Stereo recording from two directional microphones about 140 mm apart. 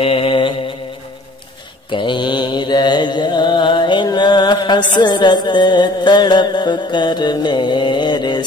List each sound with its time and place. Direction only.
0.0 s mantra: 40° left (ahead or behind)
1.9 s mantra: 35° left (ahead or behind)